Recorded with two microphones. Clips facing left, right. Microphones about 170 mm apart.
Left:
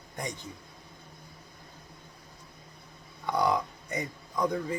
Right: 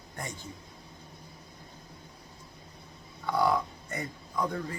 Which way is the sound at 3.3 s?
20° left (ahead or behind).